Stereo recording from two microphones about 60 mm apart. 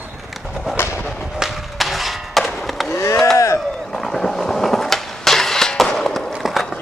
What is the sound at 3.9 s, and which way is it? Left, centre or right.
Skateboard, centre.